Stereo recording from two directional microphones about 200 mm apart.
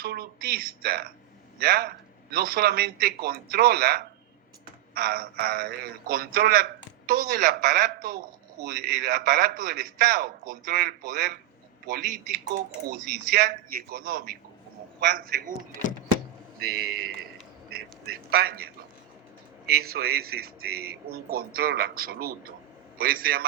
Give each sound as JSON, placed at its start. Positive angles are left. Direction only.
{"t": 0.0, "sound": "a man's voice", "side_deg": -50}
{"t": 16.6, "sound": "a man's voice", "side_deg": -50}